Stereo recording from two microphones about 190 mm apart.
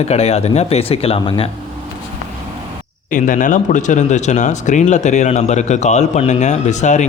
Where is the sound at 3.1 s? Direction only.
45° left (ahead or behind).